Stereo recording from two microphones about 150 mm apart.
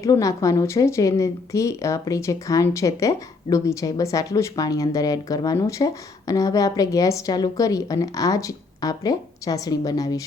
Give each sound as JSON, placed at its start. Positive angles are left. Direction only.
{"t": 0.0, "sound": "speech", "side_deg": 20}